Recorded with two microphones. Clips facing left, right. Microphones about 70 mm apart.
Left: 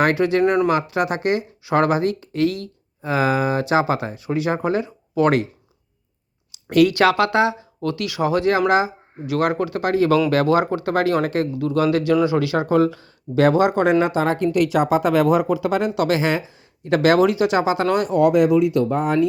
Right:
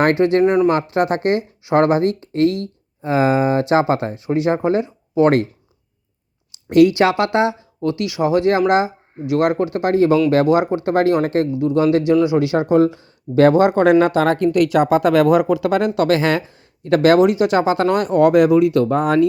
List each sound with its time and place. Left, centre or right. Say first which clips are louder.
0.0 s speech: right 3 dB; right
0.4 s speech: right 2 dB; centre
0.7 s speech: right 3 dB; right
6.7 s speech: right 3 dB; right
13.3 s speech: right 4 dB; right
14.0 s speech: right 4 dB; right
17.0 s speech: right 3 dB; right